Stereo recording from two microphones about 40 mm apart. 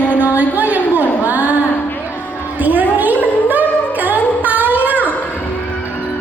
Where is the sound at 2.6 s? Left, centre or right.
Right.